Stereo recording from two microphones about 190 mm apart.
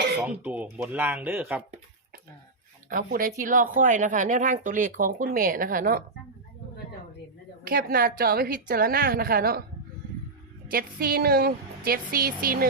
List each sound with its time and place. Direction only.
0.2 s speech: 10° right (ahead or behind)
2.9 s speech: 45° right (ahead or behind)
7.7 s speech: 55° right (ahead or behind)
10.7 s speech: 50° right (ahead or behind)